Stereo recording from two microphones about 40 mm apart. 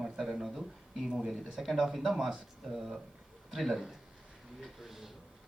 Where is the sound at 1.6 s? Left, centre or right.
Centre.